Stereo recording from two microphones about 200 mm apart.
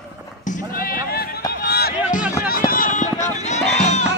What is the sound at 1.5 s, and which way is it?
Run, 50° left (ahead or behind).